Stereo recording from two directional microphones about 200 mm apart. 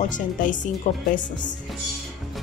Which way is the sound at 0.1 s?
40° left (ahead or behind).